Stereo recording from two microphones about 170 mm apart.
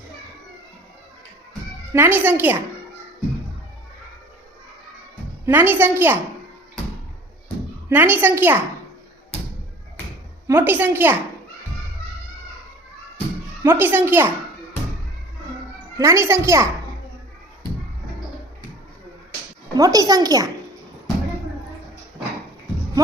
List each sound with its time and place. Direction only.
1.9 s a woman's voice: 10° right (ahead or behind)
5.5 s a woman's voice: 10° right (ahead or behind)
7.9 s a woman's voice: 10° right (ahead or behind)
10.4 s a woman's voice: 15° right (ahead or behind)
13.6 s a woman's voice: 10° right (ahead or behind)
16.0 s a woman's voice: 15° right (ahead or behind)
19.7 s speech: 20° right (ahead or behind)